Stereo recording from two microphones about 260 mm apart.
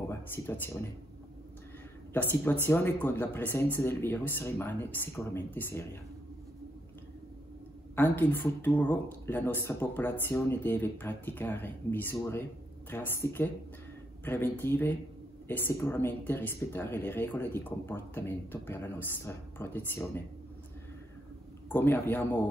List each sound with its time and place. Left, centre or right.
0.3 s speech: centre
2.1 s speech: centre
7.9 s speech: centre
21.6 s speech: centre